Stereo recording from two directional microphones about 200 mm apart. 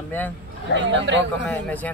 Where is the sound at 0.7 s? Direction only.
65° right (ahead or behind).